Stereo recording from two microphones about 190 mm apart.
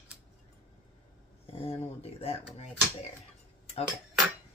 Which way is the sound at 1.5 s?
30° left (ahead or behind).